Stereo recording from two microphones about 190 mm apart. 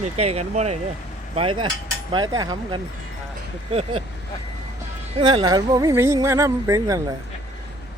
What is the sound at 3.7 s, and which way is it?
Speech, 30° right (ahead or behind).